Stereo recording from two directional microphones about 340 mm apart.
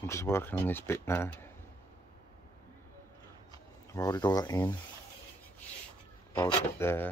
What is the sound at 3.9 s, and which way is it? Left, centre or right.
Speech, centre.